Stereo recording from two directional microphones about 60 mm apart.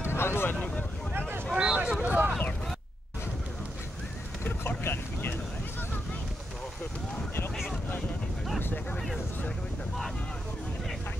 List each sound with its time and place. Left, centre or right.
0.0 s vehicle: left
1.5 s vehicle: right
4.5 s vehicle: left